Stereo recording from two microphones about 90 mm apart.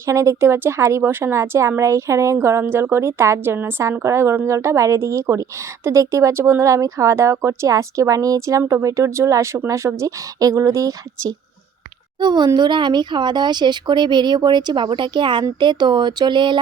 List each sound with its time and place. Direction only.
0.0 s a woman's voice: 35° right (ahead or behind)
12.2 s a child's voice: 55° right (ahead or behind)